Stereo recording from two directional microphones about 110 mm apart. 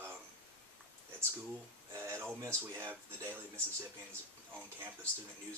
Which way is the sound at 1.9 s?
25° right (ahead or behind).